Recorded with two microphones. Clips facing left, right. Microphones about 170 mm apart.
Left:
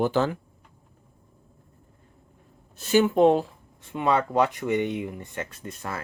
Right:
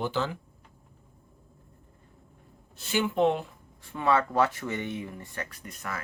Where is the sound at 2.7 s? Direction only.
45° left (ahead or behind).